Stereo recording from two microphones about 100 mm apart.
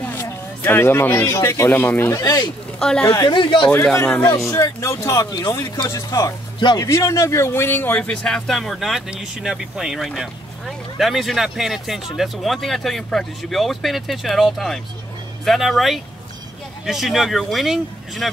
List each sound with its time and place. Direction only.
0.0 s speech: 20° left (ahead or behind)
2.0 s speech: 35° left (ahead or behind)
2.8 s speech: 5° left (ahead or behind)
3.2 s speech: 50° left (ahead or behind)
3.7 s a man's voice: 20° left (ahead or behind)
4.5 s speech: 35° left (ahead or behind)
5.3 s speech: 45° left (ahead or behind)
5.9 s a man's voice: 30° left (ahead or behind)
8.0 s speech: 10° left (ahead or behind)